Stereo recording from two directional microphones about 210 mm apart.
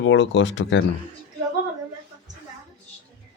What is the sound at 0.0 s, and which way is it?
Speech, 60° left (ahead or behind).